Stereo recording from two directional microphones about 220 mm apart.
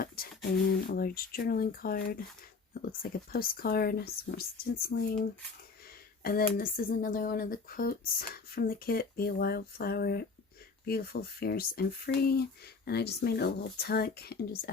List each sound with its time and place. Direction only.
0.2 s a sound: 40° left (ahead or behind)
0.9 s speech: 40° left (ahead or behind)
6.2 s speech: 40° left (ahead or behind)